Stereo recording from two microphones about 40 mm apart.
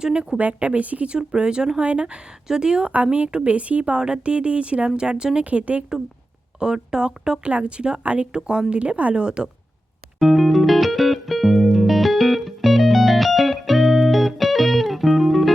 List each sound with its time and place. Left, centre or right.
0.0 s speech: centre
0.3 s speech: right
2.9 s speech: right
5.4 s speech: right
6.6 s speech: centre
9.1 s speech: right
10.2 s music: centre